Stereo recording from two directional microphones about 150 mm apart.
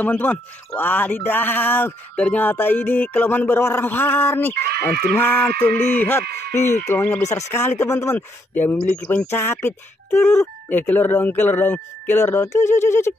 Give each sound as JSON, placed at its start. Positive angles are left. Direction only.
{"t": 0.0, "sound": "speech", "side_deg": 10}
{"t": 4.6, "sound": "speech", "side_deg": -90}
{"t": 5.1, "sound": "speech", "side_deg": 15}